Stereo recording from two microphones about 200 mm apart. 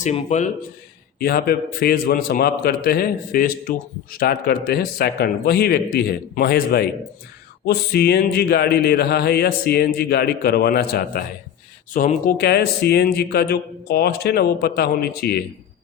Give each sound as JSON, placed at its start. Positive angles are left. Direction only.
{"t": 0.0, "sound": "speech", "side_deg": 35}
{"t": 1.2, "sound": "a man's voice", "side_deg": 50}